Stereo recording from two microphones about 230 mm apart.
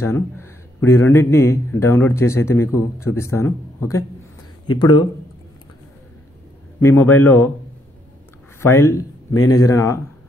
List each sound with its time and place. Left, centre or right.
0.0 s a man's voice: centre
6.8 s a man's voice: centre
8.5 s speech: centre